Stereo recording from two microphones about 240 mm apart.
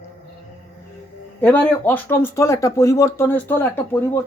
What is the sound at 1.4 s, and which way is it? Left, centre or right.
Speech, centre.